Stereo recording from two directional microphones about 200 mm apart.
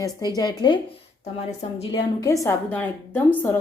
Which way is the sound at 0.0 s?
20° left (ahead or behind).